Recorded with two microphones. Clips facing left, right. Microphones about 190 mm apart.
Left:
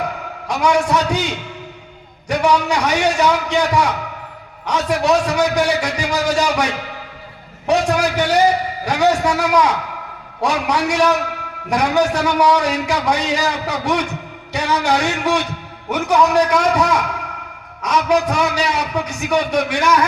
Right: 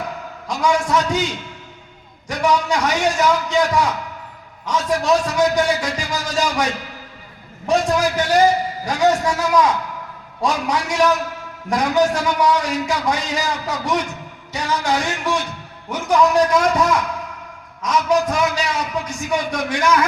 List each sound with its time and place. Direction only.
0.4 s a man's voice: 65° left (ahead or behind)
17.8 s a man's voice: 65° left (ahead or behind)